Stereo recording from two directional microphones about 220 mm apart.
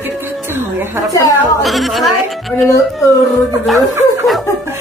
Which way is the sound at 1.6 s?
Centre (ahead or behind).